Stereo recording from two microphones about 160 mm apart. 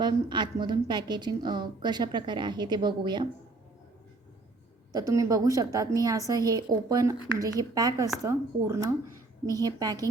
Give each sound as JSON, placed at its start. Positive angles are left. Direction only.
{"t": 0.0, "sound": "a woman's voice", "side_deg": -30}
{"t": 4.9, "sound": "a woman's voice", "side_deg": -20}